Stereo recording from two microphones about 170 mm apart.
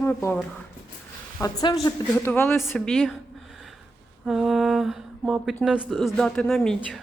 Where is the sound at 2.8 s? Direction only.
Centre (ahead or behind).